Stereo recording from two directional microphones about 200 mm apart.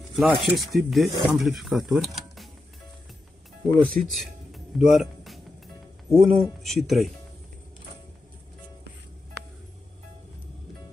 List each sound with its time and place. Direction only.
0.1 s speech: centre (ahead or behind)
3.6 s speech: centre (ahead or behind)